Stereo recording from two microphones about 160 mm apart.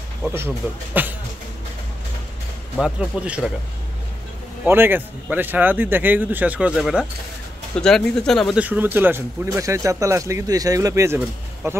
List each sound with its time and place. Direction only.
0.2 s speech: 15° right (ahead or behind)
2.8 s speech: 5° right (ahead or behind)
4.6 s speech: 15° right (ahead or behind)